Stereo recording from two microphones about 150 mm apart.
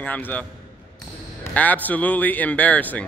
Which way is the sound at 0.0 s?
10° left (ahead or behind).